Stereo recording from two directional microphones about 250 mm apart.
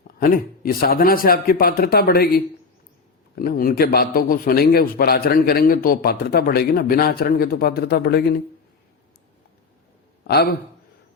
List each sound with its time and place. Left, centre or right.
0.2 s a man's voice: left
10.2 s a man's voice: left